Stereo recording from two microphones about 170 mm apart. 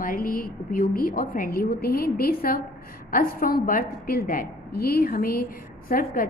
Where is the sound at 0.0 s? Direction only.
55° left (ahead or behind).